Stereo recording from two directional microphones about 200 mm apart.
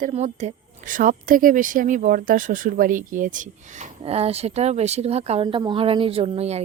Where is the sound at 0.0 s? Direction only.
35° right (ahead or behind).